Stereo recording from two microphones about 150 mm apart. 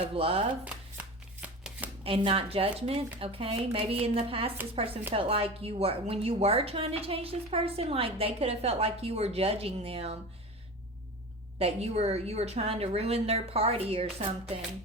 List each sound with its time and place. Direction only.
0.0 s a woman's voice: 40° right (ahead or behind)
0.6 s shuffling cards: 10° right (ahead or behind)
2.0 s a woman's voice: 40° right (ahead or behind)
11.6 s a woman's voice: 45° right (ahead or behind)